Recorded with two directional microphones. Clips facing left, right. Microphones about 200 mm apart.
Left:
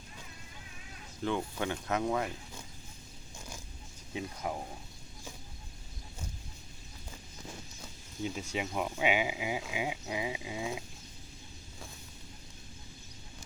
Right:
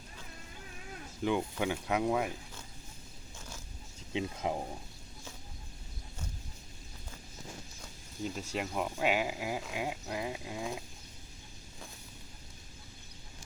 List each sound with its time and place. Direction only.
1.2 s speech: 10° right (ahead or behind)
4.1 s speech: 20° right (ahead or behind)
7.8 s speech: centre (ahead or behind)